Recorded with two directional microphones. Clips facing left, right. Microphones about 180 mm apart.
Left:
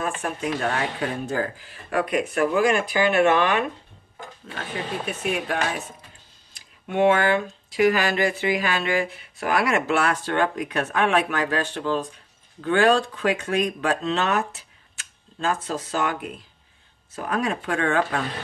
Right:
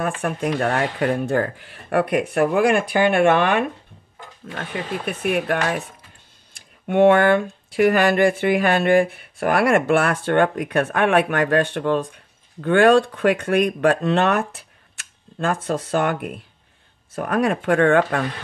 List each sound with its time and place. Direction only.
0.0 s speech: 55° right (ahead or behind)
5.0 s speech: 60° right (ahead or behind)
6.9 s speech: 55° right (ahead or behind)